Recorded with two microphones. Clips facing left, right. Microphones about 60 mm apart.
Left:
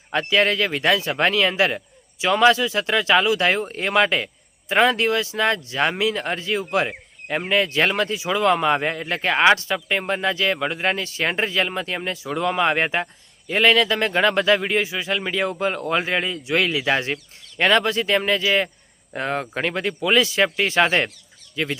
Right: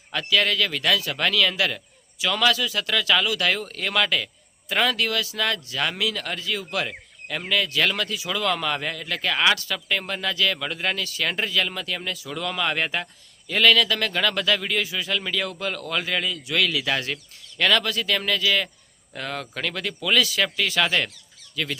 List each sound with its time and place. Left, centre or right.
0.1 s speech: left